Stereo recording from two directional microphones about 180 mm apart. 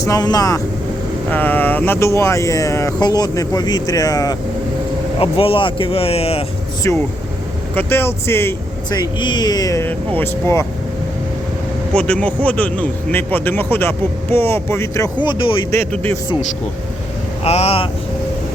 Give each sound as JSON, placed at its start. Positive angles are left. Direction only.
{"t": 0.0, "sound": "a man's voice", "side_deg": 20}
{"t": 5.2, "sound": "speech", "side_deg": 30}
{"t": 6.8, "sound": "a man's voice", "side_deg": 15}
{"t": 11.9, "sound": "a man's voice", "side_deg": 5}
{"t": 15.7, "sound": "a man's voice", "side_deg": 10}
{"t": 17.4, "sound": "speech", "side_deg": 35}